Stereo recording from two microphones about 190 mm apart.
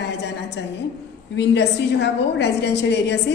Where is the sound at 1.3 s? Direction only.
65° left (ahead or behind).